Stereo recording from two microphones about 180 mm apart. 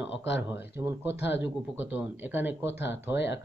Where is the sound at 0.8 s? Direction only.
15° right (ahead or behind).